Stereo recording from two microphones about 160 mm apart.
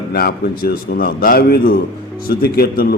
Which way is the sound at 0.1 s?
65° left (ahead or behind).